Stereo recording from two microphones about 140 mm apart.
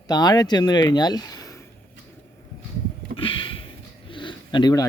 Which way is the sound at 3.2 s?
40° left (ahead or behind).